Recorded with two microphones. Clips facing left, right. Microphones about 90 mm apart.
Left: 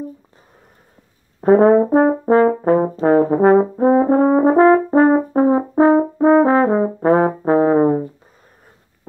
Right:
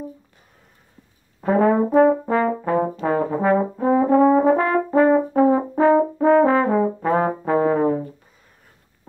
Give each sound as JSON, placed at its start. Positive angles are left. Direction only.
{"t": 1.4, "sound": "brass instrument", "side_deg": 40}